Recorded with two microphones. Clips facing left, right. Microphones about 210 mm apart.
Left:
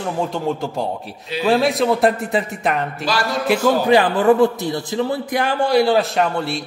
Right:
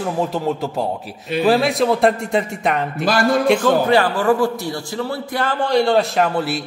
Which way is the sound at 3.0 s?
55° right (ahead or behind).